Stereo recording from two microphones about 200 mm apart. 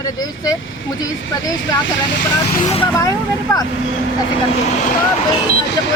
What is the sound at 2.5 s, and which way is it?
Speech, 35° left (ahead or behind).